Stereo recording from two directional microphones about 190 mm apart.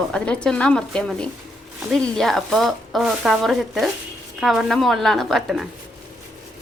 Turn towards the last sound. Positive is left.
turn(degrees=0)  # may be behind; listen again after turning